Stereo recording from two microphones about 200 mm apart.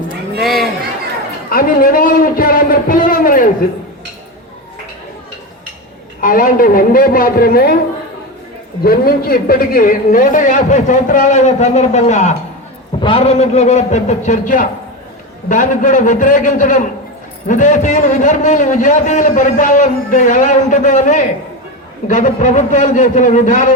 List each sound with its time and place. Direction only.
0.4 s chatter: centre (ahead or behind)
1.5 s a man's voice: 45° left (ahead or behind)
6.1 s a man's voice: 45° left (ahead or behind)
8.8 s a man's voice: 45° left (ahead or behind)